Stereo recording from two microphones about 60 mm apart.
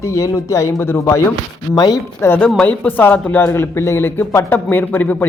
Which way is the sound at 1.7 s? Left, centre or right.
Left.